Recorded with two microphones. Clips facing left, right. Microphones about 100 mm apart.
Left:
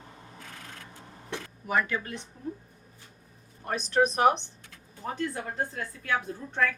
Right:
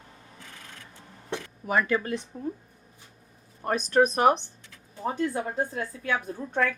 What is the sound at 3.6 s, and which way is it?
Speech, 50° right (ahead or behind).